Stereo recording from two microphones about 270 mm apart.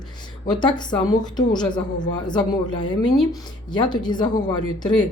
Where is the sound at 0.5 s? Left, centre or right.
Centre.